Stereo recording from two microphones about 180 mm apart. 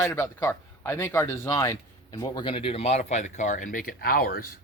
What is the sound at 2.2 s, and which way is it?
Speech, 25° left (ahead or behind).